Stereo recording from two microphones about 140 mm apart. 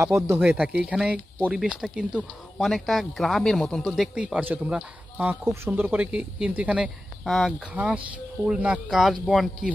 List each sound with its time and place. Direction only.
0.0 s speech: 20° right (ahead or behind)
0.6 s speech: 5° right (ahead or behind)